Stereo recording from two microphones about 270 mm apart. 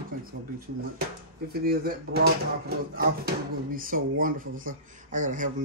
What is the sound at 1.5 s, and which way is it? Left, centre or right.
Speech, right.